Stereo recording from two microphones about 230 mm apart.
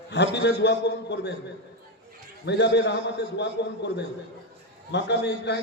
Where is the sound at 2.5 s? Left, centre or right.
Left.